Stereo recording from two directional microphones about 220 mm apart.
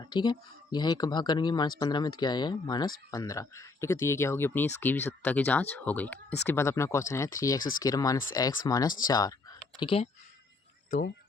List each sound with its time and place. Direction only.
0.0 s speech: 20° left (ahead or behind)